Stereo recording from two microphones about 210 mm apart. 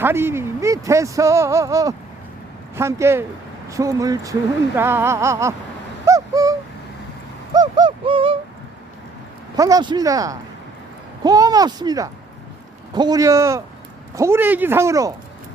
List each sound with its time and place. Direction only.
0.0 s speech: 10° right (ahead or behind)
6.1 s bird: 15° right (ahead or behind)
7.5 s owl: 20° right (ahead or behind)
9.6 s speech: 15° right (ahead or behind)